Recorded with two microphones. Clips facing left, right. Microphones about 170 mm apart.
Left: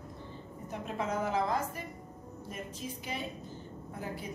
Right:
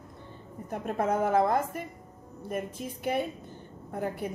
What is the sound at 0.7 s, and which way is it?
A woman's voice, 55° right (ahead or behind).